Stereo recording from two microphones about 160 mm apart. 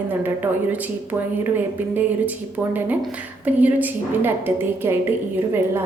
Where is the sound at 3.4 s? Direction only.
10° right (ahead or behind).